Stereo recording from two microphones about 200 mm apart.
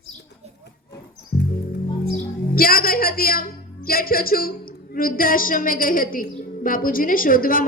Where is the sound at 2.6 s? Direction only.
45° left (ahead or behind).